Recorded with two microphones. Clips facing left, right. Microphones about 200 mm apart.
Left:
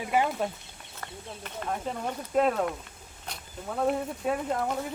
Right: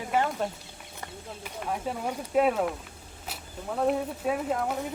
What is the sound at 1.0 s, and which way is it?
Speech, 10° right (ahead or behind).